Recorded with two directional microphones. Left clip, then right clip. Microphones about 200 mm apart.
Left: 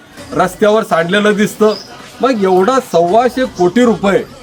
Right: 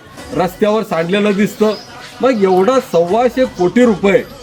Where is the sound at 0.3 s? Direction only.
10° left (ahead or behind).